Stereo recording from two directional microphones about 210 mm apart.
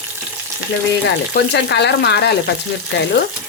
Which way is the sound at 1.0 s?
55° left (ahead or behind).